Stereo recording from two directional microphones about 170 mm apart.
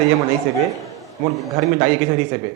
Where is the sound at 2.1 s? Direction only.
15° right (ahead or behind).